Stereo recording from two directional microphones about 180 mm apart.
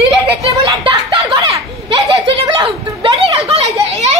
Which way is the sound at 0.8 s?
30° right (ahead or behind).